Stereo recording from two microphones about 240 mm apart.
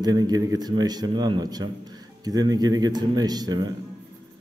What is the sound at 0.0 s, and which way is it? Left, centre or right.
Speech, centre.